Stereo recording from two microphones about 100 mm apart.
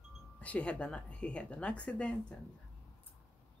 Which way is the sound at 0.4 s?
15° left (ahead or behind).